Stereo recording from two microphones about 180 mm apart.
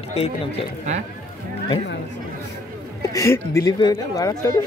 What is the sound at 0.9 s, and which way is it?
Speech, 40° right (ahead or behind).